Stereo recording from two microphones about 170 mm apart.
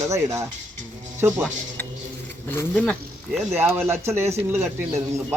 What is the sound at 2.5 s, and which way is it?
Speech, 10° left (ahead or behind).